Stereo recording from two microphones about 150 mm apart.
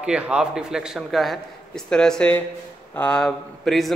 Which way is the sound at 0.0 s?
5° right (ahead or behind).